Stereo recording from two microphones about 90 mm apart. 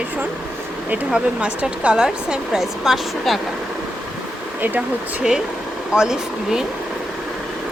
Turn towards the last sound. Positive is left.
turn(degrees=-5)  # may be behind; listen again after turning